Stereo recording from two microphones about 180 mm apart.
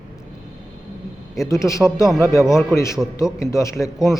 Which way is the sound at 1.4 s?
15° left (ahead or behind).